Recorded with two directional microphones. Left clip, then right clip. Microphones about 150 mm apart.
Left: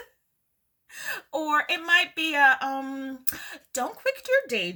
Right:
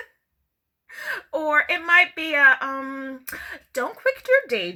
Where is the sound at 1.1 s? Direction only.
15° left (ahead or behind).